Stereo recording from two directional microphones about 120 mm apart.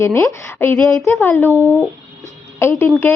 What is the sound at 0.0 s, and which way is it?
A woman's voice, 20° left (ahead or behind).